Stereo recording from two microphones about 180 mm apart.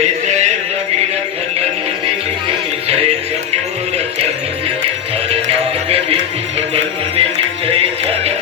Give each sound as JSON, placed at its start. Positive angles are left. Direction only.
{"t": 0.0, "sound": "music", "side_deg": -40}
{"t": 5.3, "sound": "music", "side_deg": -35}
{"t": 7.2, "sound": "music", "side_deg": -30}